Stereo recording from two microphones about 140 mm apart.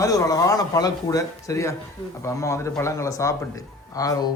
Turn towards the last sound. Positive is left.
turn(degrees=25)  # may be behind; listen again after turning